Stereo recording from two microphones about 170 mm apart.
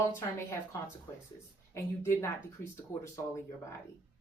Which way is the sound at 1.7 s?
15° left (ahead or behind).